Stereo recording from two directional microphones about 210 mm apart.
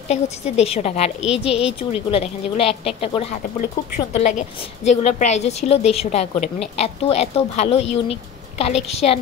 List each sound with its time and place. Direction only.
0.1 s a woman's voice: 30° left (ahead or behind)